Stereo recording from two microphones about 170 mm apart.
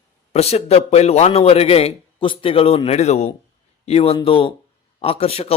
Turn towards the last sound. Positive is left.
turn(degrees=35)  # may be behind; listen again after turning